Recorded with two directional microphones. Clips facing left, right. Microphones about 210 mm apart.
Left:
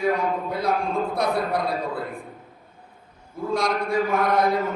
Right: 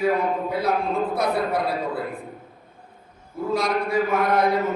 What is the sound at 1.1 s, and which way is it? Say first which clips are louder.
Speech: right 1 dB; 5° right (ahead or behind).